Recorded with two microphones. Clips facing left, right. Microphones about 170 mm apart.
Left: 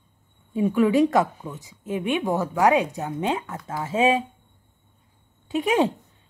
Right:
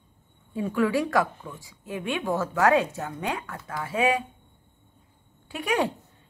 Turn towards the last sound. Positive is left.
turn(degrees=20)  # may be behind; listen again after turning